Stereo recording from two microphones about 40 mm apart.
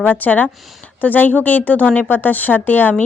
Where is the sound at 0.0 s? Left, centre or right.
Left.